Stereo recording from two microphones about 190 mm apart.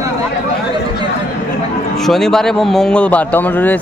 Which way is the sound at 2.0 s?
Centre (ahead or behind).